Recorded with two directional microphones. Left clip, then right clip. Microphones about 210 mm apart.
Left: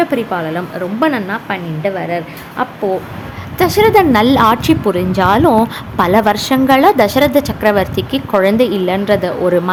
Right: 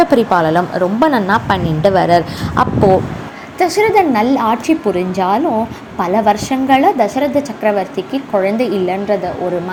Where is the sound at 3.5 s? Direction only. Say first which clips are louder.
Left 2 dB; 10° left (ahead or behind).